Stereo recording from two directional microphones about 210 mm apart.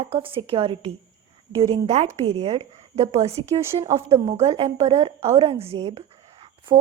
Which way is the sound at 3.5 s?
20° right (ahead or behind).